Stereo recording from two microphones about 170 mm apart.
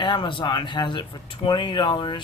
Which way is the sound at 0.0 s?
30° left (ahead or behind).